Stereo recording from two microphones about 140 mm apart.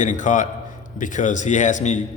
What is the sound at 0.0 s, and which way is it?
A man's voice, 65° left (ahead or behind).